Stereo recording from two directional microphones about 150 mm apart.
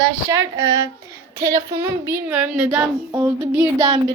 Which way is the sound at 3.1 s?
15° right (ahead or behind).